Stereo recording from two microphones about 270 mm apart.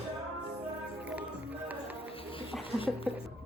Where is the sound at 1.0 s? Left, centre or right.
Centre.